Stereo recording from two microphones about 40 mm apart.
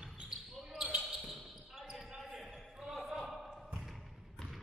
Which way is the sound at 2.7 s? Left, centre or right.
Centre.